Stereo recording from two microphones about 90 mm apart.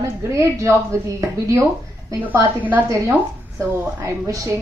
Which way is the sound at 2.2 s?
20° right (ahead or behind).